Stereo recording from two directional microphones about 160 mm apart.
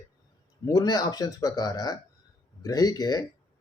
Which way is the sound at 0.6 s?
20° left (ahead or behind).